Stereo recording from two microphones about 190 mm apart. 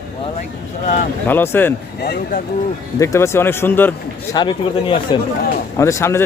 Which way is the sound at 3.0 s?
15° left (ahead or behind).